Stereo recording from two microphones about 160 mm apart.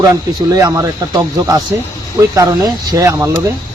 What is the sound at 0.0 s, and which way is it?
Speech, 20° right (ahead or behind).